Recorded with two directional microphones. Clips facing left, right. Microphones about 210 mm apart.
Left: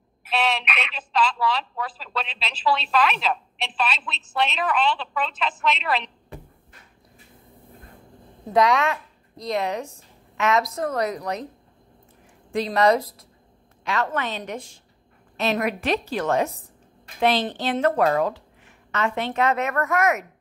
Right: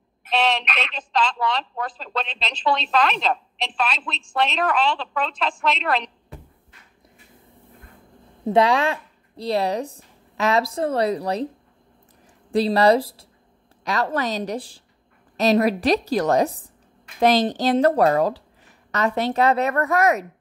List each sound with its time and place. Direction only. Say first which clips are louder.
0.2 s a woman's voice: right 3 dB; 5° left (ahead or behind)
8.5 s speech: right 1 dB; 30° right (ahead or behind)
12.5 s a woman's voice: right 3 dB; 35° right (ahead or behind)